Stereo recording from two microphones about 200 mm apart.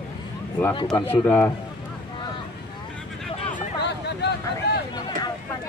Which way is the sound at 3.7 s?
55° left (ahead or behind).